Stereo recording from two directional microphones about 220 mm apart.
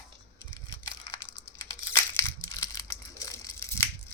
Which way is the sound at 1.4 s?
10° left (ahead or behind).